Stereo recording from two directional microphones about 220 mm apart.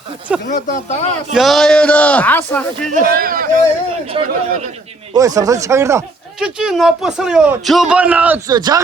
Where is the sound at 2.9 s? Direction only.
40° right (ahead or behind).